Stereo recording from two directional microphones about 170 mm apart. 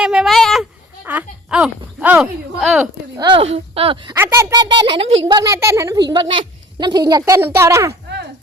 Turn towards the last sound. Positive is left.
turn(degrees=-15)  # may be behind; listen again after turning